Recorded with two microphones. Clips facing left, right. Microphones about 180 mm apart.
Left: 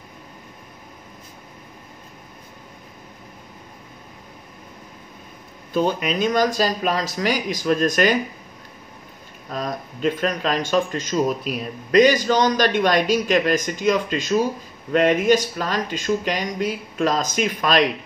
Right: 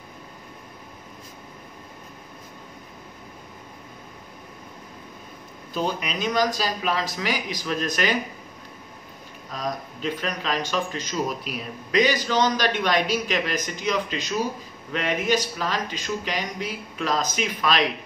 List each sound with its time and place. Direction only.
5.7 s speech: 55° left (ahead or behind)
9.5 s speech: 50° left (ahead or behind)